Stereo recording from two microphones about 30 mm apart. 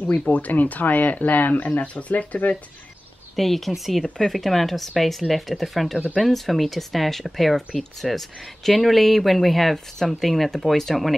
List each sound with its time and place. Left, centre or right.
0.0 s speech: left
1.1 s speech: left
3.3 s speech: centre
4.0 s speech: centre